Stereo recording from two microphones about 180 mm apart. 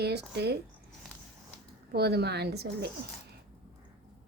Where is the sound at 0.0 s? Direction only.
65° right (ahead or behind).